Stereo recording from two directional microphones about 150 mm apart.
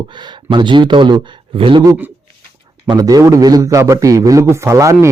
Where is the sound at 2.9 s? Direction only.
25° right (ahead or behind).